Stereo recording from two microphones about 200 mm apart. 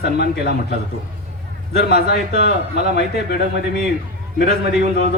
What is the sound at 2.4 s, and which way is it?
Speech, 55° left (ahead or behind).